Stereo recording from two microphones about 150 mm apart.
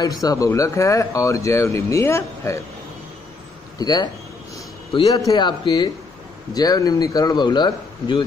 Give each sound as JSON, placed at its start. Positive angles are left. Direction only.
{"t": 0.0, "sound": "speech", "side_deg": 25}
{"t": 3.7, "sound": "speech", "side_deg": 25}